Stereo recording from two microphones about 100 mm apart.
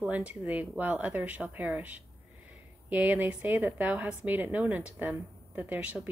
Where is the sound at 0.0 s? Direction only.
15° right (ahead or behind).